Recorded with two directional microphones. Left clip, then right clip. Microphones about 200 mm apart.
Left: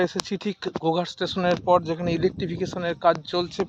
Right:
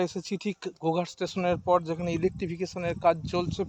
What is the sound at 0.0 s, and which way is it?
Speech, centre (ahead or behind).